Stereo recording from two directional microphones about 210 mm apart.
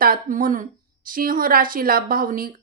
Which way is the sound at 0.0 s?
40° right (ahead or behind).